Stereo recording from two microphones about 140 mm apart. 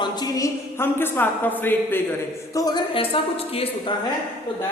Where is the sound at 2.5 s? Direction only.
25° left (ahead or behind); by 3.9 s 45° left (ahead or behind).